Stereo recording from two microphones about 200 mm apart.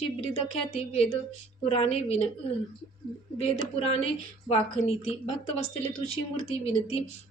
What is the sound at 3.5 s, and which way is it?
A woman's voice, 30° left (ahead or behind).